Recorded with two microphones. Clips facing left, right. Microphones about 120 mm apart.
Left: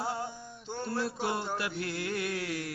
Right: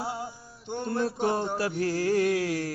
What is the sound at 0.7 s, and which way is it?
Mantra, 20° right (ahead or behind).